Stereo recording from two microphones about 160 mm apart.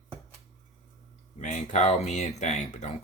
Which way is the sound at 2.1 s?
45° left (ahead or behind).